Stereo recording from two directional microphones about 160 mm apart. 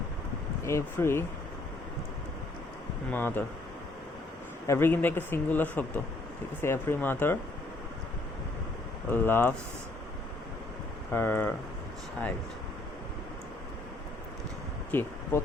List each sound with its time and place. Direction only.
0.6 s speech: 15° left (ahead or behind)
3.1 s speech: 10° left (ahead or behind)
4.6 s speech: 15° left (ahead or behind)
9.0 s speech: 15° left (ahead or behind)
11.1 s speech: 10° left (ahead or behind)
14.9 s speech: 10° left (ahead or behind)